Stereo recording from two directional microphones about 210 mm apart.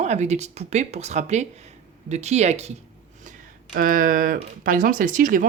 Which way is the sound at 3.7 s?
40° right (ahead or behind).